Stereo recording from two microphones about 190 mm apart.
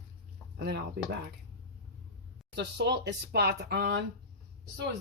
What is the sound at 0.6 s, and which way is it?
Speech, 60° right (ahead or behind).